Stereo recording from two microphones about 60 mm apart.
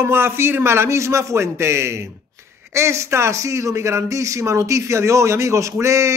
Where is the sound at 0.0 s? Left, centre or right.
Right.